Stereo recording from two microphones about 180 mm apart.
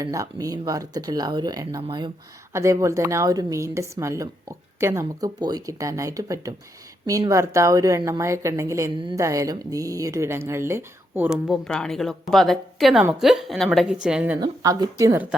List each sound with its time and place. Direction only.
0.0 s a woman's voice: 20° right (ahead or behind)
9.0 s speech: 25° right (ahead or behind); by 14.3 s 5° right (ahead or behind)
14.4 s speech: 20° right (ahead or behind)